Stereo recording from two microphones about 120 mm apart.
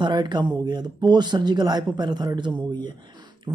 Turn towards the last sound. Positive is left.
turn(degrees=-40)  # may be behind; listen again after turning